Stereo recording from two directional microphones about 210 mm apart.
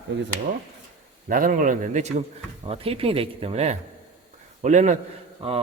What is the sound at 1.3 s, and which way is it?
Speech, 40° right (ahead or behind).